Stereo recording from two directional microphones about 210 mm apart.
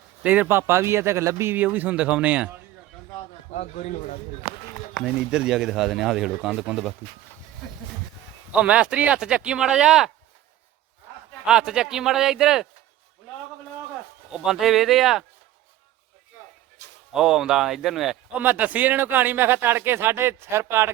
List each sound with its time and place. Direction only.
0.2 s speech: 5° right (ahead or behind)
3.5 s a man's voice: 35° left (ahead or behind)
4.9 s a man's voice: centre (ahead or behind)
8.5 s a man's voice: 5° right (ahead or behind)
11.4 s a man's voice: 5° right (ahead or behind)
14.3 s a man's voice: 5° right (ahead or behind)
17.1 s speech: centre (ahead or behind)